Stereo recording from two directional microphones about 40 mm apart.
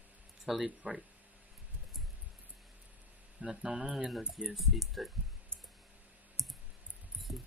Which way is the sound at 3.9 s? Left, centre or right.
Centre.